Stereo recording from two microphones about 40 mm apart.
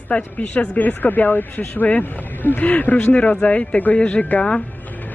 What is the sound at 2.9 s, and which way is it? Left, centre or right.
Speech, left.